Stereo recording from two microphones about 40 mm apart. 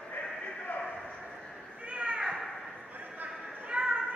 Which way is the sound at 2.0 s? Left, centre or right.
Right.